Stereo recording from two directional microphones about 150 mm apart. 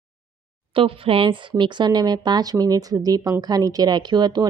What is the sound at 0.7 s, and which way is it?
Speech, 35° right (ahead or behind).